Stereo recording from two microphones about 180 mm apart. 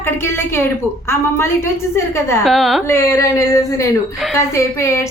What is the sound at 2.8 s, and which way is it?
A woman's voice, 15° left (ahead or behind).